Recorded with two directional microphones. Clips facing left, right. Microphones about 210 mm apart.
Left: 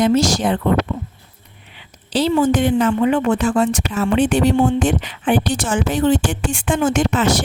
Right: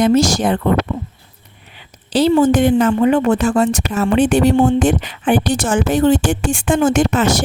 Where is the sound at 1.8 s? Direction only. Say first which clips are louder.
Right 4 dB; 45° right (ahead or behind).